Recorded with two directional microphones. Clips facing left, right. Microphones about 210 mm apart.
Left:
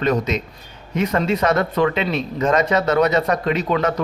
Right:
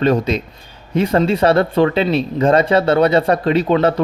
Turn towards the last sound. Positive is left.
turn(degrees=-30)  # may be behind; listen again after turning